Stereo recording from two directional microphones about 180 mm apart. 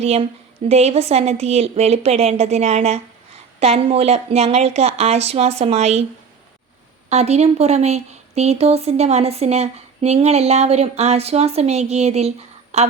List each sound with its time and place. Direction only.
0.0 s a woman's voice: 35° right (ahead or behind)
7.1 s a woman's voice: 35° right (ahead or behind)